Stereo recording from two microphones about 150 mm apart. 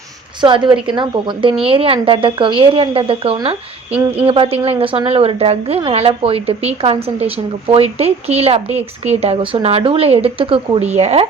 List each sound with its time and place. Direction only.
0.4 s a woman's voice: 35° right (ahead or behind)